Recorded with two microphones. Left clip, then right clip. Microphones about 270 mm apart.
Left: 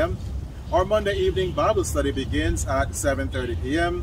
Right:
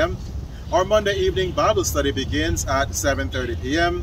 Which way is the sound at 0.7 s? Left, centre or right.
Centre.